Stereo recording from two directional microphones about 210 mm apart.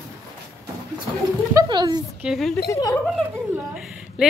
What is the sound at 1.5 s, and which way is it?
Speech, 20° right (ahead or behind).